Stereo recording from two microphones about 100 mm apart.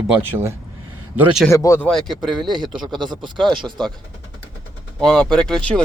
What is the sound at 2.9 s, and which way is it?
Speech, 50° right (ahead or behind).